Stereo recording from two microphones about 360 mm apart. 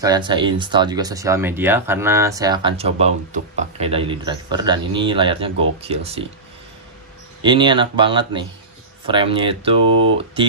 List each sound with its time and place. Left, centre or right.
0.0 s speech: centre
7.4 s speech: centre